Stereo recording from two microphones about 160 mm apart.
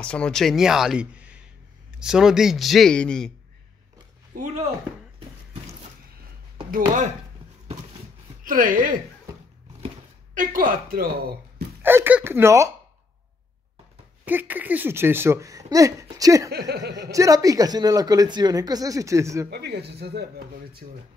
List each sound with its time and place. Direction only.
0.0 s speech: 5° left (ahead or behind)
4.4 s speech: 45° right (ahead or behind)
6.7 s speech: 55° right (ahead or behind)
8.5 s speech: 60° right (ahead or behind)
10.3 s speech: 60° right (ahead or behind)
11.8 s speech: 15° right (ahead or behind)
14.2 s speech: 10° right (ahead or behind)
16.4 s speech: 90° right
17.1 s speech: 20° right (ahead or behind)
19.5 s speech: 90° right